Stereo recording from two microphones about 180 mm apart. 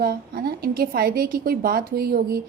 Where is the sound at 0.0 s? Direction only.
55° right (ahead or behind).